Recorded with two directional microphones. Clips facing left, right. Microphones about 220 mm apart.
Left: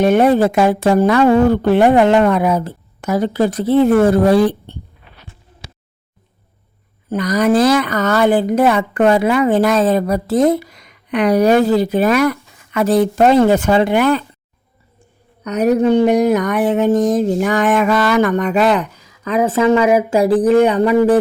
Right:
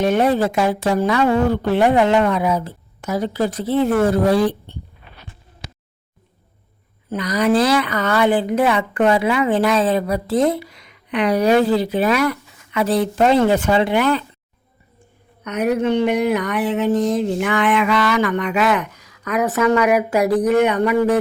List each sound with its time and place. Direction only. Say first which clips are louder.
0.0 s speech: left 5 dB; 55° left (ahead or behind)
7.1 s a woman's voice: left 3 dB; 45° left (ahead or behind)
15.4 s speech: left 5 dB; 40° left (ahead or behind)